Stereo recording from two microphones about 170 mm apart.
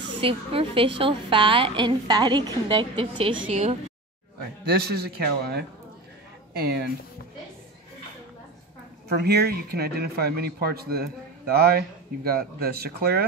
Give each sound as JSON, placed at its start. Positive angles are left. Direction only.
{"t": 0.2, "sound": "a woman's voice", "side_deg": -35}
{"t": 4.6, "sound": "speech", "side_deg": -70}
{"t": 9.1, "sound": "speech", "side_deg": -70}